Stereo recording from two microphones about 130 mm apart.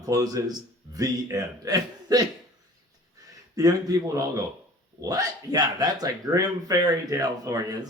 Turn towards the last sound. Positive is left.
turn(degrees=-30)  # may be behind; listen again after turning